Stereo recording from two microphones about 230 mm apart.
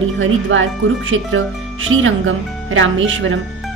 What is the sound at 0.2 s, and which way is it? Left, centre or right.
Speech, right.